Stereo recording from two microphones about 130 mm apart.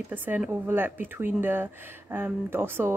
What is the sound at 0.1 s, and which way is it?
Speech, 15° right (ahead or behind).